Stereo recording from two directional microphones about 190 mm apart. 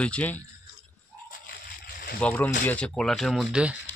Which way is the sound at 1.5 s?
50° left (ahead or behind).